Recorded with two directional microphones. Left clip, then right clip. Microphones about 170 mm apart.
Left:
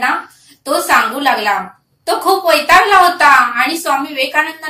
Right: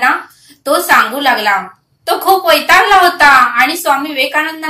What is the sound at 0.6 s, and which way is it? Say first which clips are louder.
A woman's voice: right 3 dB; 20° right (ahead or behind).